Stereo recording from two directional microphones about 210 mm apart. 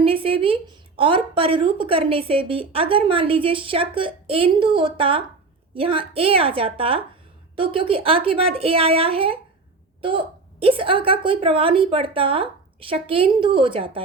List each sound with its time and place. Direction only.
0.0 s a woman's voice: 25° right (ahead or behind)